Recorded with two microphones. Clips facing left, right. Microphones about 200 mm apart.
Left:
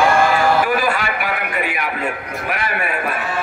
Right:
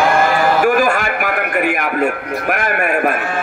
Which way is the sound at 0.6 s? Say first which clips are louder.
Right 5 dB; 45° right (ahead or behind).